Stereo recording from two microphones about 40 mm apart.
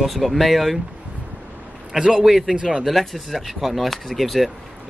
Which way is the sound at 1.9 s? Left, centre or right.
Centre.